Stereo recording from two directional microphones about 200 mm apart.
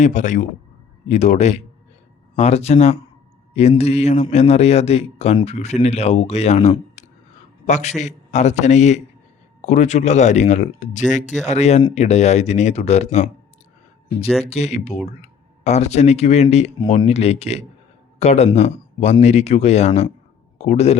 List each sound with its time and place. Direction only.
0.0 s a man's voice: 40° left (ahead or behind)
14.4 s a man's voice: 30° left (ahead or behind)